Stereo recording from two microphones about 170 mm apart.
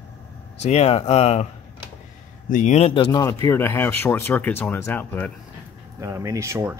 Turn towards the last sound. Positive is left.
turn(degrees=-15)  # may be behind; listen again after turning